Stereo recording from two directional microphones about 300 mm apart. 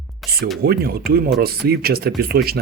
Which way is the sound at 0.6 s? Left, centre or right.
Right.